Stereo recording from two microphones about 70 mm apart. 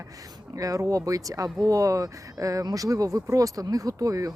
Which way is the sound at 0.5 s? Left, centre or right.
Right.